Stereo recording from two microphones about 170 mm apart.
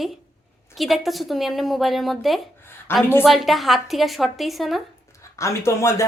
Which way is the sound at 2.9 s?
15° left (ahead or behind).